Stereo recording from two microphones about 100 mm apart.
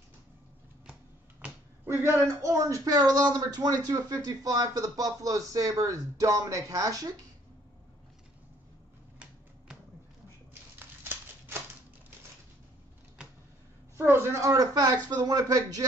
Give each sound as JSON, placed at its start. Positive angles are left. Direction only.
{"t": 1.4, "sound": "a sound", "side_deg": -15}
{"t": 1.9, "sound": "a man's voice", "side_deg": -25}
{"t": 13.9, "sound": "a man's voice", "side_deg": -25}
{"t": 14.5, "sound": "speech", "side_deg": -40}